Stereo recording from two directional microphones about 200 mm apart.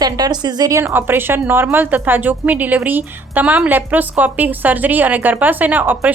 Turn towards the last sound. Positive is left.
turn(degrees=-10)  # may be behind; listen again after turning